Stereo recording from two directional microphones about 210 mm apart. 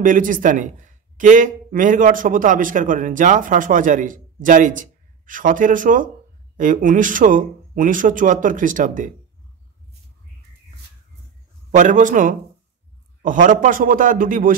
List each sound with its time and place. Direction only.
0.0 s a man's voice: 40° right (ahead or behind)
11.7 s a man's voice: 35° right (ahead or behind)